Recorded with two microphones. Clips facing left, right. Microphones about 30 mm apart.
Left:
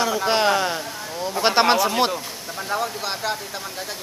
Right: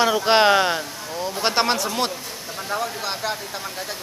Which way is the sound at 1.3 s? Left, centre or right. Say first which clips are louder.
Left 4 dB; centre.